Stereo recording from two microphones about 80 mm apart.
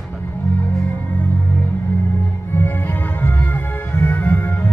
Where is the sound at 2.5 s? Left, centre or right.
Left.